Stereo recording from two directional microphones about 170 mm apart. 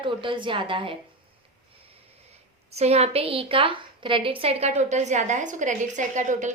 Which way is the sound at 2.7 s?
40° right (ahead or behind).